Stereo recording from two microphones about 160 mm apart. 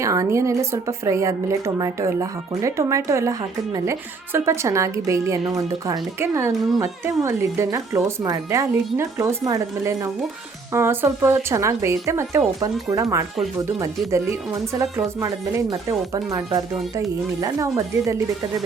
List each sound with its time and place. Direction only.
0.0 s speech: 20° right (ahead or behind)
4.4 s speech: 15° right (ahead or behind)
14.8 s speech: 20° right (ahead or behind)